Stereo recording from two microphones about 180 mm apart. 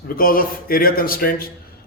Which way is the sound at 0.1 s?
50° left (ahead or behind).